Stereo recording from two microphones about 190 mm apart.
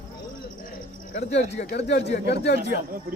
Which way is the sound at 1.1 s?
35° left (ahead or behind).